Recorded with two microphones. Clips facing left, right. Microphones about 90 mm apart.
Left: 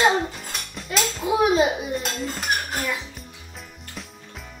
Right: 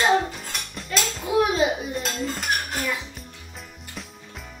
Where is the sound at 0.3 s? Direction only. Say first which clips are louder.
Even; centre (ahead or behind).